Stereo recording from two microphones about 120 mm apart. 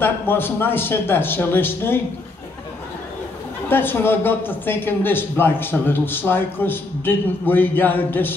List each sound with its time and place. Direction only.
0.0 s a man's voice: 15° left (ahead or behind)
3.6 s a man's voice: 15° left (ahead or behind)